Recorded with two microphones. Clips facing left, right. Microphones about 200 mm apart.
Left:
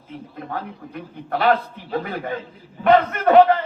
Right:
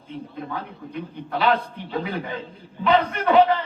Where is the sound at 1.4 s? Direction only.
50° left (ahead or behind).